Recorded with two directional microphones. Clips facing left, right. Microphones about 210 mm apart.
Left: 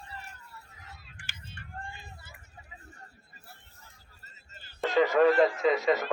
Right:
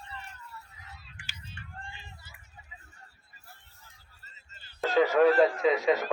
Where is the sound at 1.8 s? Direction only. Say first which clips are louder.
Left 3 dB; 45° left (ahead or behind).